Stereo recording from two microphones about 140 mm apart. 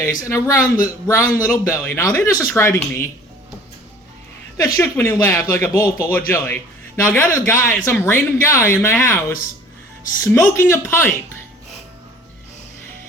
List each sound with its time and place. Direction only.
0.0 s speech: 20° left (ahead or behind)
4.5 s speech: 20° left (ahead or behind)
10.2 s speech: 20° left (ahead or behind)